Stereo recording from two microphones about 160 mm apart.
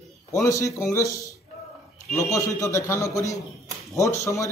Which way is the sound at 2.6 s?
20° left (ahead or behind).